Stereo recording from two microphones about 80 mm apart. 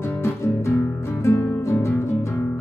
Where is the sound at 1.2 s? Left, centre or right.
Left.